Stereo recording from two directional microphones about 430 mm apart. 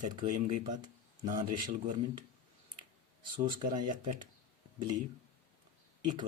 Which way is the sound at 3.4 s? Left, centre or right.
Centre.